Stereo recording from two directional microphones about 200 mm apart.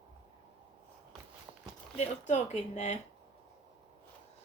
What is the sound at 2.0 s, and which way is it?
Speech, 35° left (ahead or behind).